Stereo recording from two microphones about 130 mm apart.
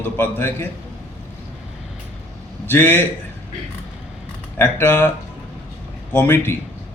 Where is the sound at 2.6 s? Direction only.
15° left (ahead or behind).